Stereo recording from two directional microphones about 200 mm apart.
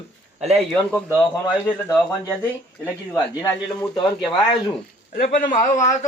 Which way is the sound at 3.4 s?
20° left (ahead or behind).